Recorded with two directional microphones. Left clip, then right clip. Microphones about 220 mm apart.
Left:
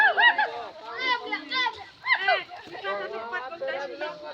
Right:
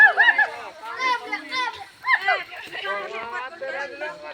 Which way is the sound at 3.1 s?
45° left (ahead or behind).